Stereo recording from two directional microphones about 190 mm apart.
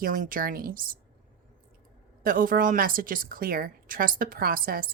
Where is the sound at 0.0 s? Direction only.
45° right (ahead or behind).